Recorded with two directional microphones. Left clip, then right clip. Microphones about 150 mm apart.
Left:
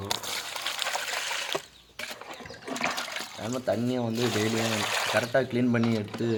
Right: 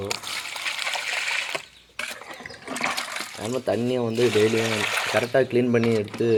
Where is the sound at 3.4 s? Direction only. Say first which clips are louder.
Right 4 dB; 20° right (ahead or behind).